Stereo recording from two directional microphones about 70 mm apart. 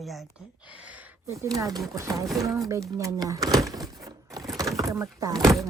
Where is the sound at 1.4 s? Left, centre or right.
Right.